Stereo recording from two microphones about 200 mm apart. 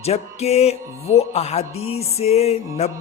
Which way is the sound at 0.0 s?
30° left (ahead or behind).